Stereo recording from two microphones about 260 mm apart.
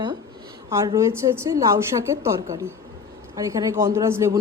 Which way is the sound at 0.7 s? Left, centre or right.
Centre.